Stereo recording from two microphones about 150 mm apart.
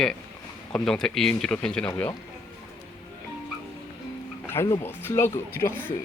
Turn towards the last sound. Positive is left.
turn(degrees=-10)  # may be behind; listen again after turning